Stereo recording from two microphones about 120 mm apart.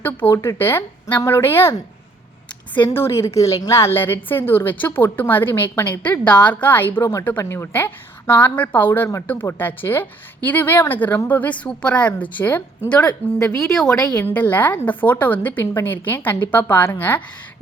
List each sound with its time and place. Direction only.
0.0 s speech: 15° left (ahead or behind)
2.7 s a woman's voice: 15° left (ahead or behind)